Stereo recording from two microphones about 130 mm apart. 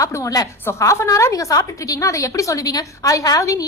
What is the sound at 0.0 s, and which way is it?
A woman's voice, 25° left (ahead or behind).